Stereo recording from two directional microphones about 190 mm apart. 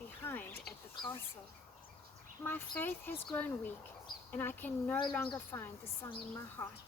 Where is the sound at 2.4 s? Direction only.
10° left (ahead or behind).